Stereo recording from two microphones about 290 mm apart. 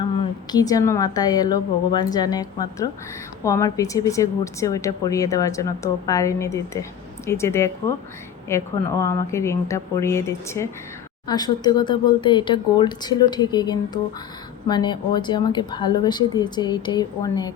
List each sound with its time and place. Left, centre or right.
0.5 s speech: centre